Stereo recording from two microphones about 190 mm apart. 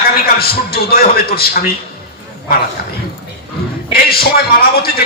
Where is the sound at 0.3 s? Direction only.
55° left (ahead or behind).